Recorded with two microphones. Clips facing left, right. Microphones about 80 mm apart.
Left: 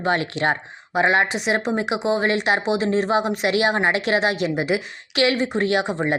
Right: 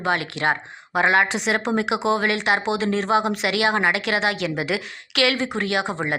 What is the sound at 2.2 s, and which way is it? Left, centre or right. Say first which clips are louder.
A woman's voice: left 1 dB; left.